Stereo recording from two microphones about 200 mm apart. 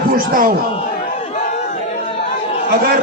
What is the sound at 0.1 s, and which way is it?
Speech, 45° right (ahead or behind).